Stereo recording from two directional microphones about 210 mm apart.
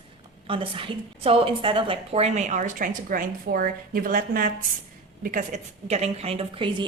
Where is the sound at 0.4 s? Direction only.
25° right (ahead or behind).